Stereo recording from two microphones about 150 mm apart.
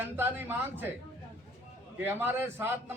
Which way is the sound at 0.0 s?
15° right (ahead or behind).